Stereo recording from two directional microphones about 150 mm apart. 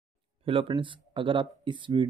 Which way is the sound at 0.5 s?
35° right (ahead or behind).